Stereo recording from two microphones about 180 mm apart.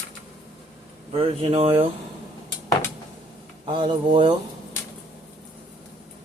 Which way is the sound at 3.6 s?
25° right (ahead or behind).